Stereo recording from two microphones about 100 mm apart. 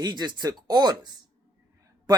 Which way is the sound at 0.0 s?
45° right (ahead or behind).